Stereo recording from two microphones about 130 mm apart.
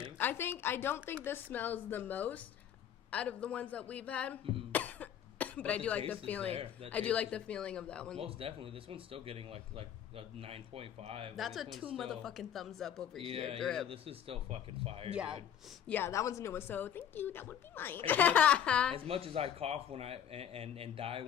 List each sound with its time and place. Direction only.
0.2 s speech: 15° left (ahead or behind)
4.7 s cough: 10° left (ahead or behind)
6.1 s speech: 10° left (ahead or behind)
6.5 s speech: 50° right (ahead or behind)
6.9 s speech: 10° left (ahead or behind)
8.2 s speech: 50° right (ahead or behind)
11.3 s speech: centre (ahead or behind)
13.2 s speech: 50° right (ahead or behind)
13.6 s speech: 5° left (ahead or behind)
13.8 s speech: 45° right (ahead or behind)
15.1 s speech: 10° right (ahead or behind)
15.9 s speech: 15° left (ahead or behind)
18.9 s speech: 45° right (ahead or behind)